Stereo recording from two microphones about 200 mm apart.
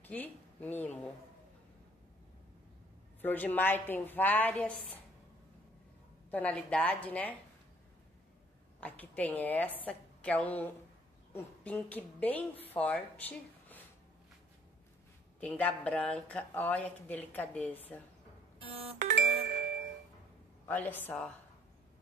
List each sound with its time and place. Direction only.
0.0 s speech: 10° left (ahead or behind)
3.2 s speech: 10° left (ahead or behind)
6.3 s speech: 10° left (ahead or behind)
8.8 s a woman's voice: 5° left (ahead or behind)
15.4 s speech: 5° left (ahead or behind)
18.9 s music: 60° right (ahead or behind)
20.6 s speech: 10° left (ahead or behind)